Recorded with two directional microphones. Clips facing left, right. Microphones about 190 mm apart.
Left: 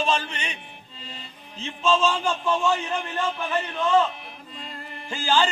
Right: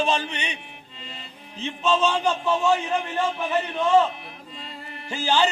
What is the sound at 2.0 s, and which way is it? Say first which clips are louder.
Speech: right 2 dB; 20° right (ahead or behind).